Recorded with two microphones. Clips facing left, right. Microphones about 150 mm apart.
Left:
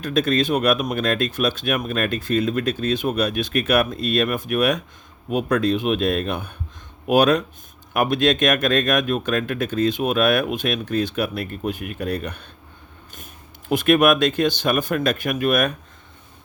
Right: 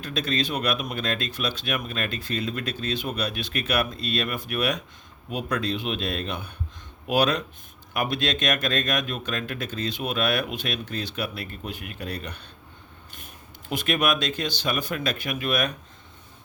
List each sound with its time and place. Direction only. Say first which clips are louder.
0.0 s speech: left 8 dB; 50° left (ahead or behind)
13.7 s speech: left 9 dB; 55° left (ahead or behind)